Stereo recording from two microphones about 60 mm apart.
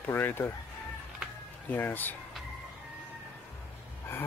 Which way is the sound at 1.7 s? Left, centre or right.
Left.